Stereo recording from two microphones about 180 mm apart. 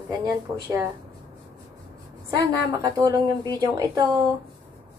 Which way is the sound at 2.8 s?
20° right (ahead or behind).